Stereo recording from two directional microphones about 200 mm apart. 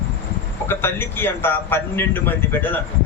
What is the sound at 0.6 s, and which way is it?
A man's voice, 10° left (ahead or behind).